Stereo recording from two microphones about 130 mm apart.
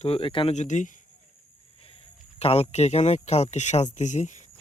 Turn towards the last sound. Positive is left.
turn(degrees=65)  # may be behind; listen again after turning